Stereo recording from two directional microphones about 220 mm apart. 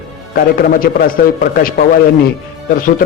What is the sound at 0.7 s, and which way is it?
A man's voice, 40° left (ahead or behind).